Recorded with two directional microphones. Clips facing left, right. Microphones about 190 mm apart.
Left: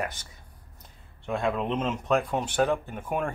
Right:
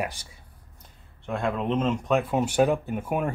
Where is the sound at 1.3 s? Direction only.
Centre (ahead or behind).